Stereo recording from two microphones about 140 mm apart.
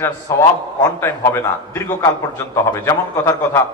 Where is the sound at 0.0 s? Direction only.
20° left (ahead or behind).